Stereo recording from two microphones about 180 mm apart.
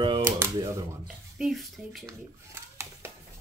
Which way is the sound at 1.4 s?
Centre (ahead or behind).